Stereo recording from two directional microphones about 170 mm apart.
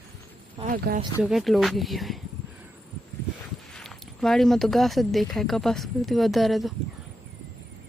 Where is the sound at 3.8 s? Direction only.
5° left (ahead or behind).